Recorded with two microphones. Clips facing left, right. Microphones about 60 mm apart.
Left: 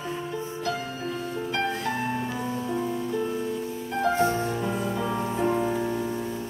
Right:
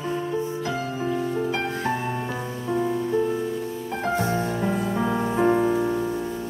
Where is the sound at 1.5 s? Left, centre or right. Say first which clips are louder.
Right 2 dB; right.